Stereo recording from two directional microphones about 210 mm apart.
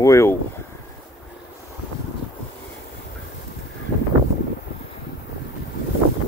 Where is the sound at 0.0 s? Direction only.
15° left (ahead or behind).